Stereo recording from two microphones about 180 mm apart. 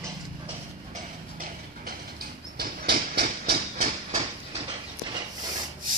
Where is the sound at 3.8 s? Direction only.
40° right (ahead or behind).